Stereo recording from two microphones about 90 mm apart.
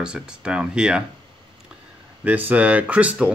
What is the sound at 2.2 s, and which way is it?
Speech, 20° right (ahead or behind).